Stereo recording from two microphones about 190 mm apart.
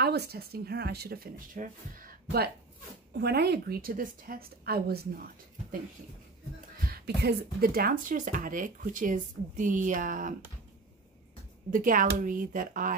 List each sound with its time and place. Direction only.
0.0 s speech: 60° right (ahead or behind)
6.8 s speech: 55° right (ahead or behind)
11.7 s speech: 45° right (ahead or behind)